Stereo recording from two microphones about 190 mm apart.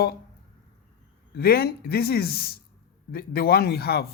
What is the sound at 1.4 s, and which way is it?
Speech, 55° left (ahead or behind).